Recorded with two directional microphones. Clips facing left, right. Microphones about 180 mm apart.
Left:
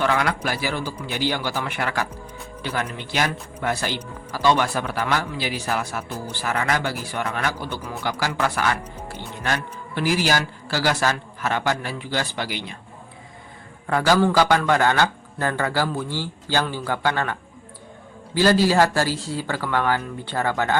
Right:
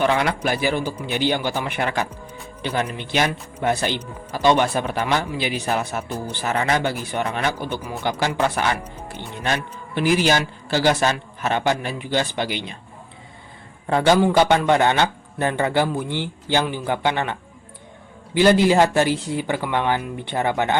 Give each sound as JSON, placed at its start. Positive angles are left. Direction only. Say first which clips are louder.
{"t": 0.0, "sound": "a man's voice", "louder": "right 2 dB", "side_deg": -20}
{"t": 13.8, "sound": "a man's voice", "louder": "right 2 dB", "side_deg": -25}
{"t": 18.3, "sound": "a man's voice", "louder": "right 2 dB", "side_deg": -20}